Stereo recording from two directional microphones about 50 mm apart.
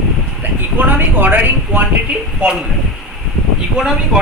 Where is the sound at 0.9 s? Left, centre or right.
Right.